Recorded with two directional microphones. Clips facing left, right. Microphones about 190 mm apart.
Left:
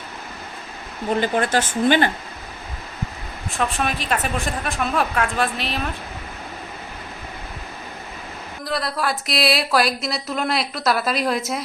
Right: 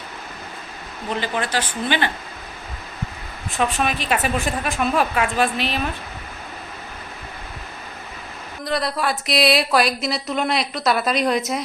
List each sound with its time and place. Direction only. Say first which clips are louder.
1.1 s speech: left 4 dB; 50° left (ahead or behind)
3.6 s speech: right 2 dB; centre (ahead or behind)
8.6 s speech: right 2 dB; centre (ahead or behind)